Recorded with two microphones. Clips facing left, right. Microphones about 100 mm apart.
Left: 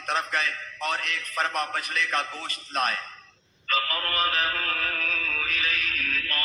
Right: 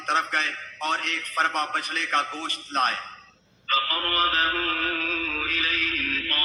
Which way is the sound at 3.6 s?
35° right (ahead or behind).